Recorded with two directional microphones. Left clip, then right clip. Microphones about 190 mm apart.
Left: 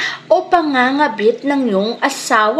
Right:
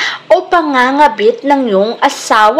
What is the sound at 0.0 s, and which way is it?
A woman's voice, 15° right (ahead or behind).